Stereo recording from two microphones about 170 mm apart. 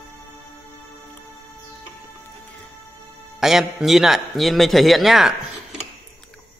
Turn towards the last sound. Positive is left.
turn(degrees=0)  # may be behind; listen again after turning